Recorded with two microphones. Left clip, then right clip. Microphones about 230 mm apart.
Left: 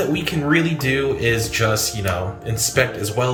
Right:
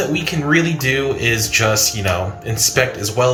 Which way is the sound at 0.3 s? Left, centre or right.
Centre.